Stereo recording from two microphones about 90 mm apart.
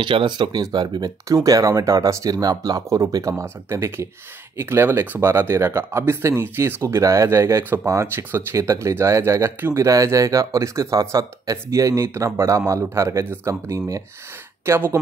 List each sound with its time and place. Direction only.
0.0 s speech: 60° right (ahead or behind); by 9.8 s 25° right (ahead or behind)
9.8 s speech: 40° right (ahead or behind)